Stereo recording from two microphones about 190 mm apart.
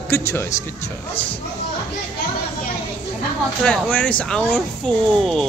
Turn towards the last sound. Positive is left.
turn(degrees=0)  # may be behind; listen again after turning